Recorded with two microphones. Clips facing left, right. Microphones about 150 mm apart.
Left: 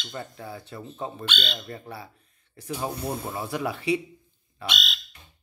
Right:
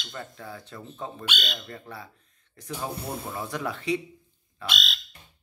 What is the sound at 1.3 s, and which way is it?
Speech, 10° right (ahead or behind).